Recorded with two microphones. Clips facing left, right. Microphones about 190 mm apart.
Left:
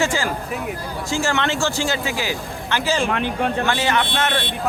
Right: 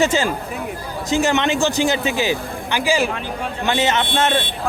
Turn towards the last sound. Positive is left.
turn(degrees=-25)  # may be behind; listen again after turning